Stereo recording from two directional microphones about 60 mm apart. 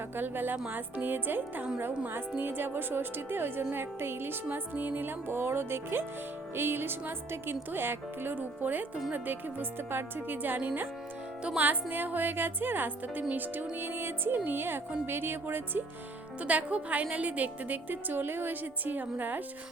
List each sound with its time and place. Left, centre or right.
0.2 s speech: right
16.4 s a woman's voice: right